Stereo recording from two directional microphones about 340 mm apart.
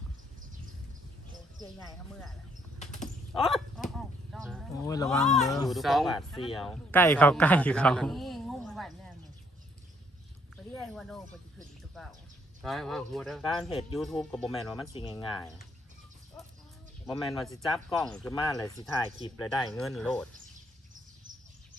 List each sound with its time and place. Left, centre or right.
1.9 s speech: centre
2.7 s a sound: left
3.3 s a sound: centre
5.3 s a man's voice: centre
10.8 s speech: centre
12.6 s speech: centre
17.1 s speech: centre